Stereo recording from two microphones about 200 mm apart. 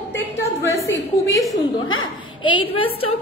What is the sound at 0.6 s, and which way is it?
A woman's voice, 15° left (ahead or behind).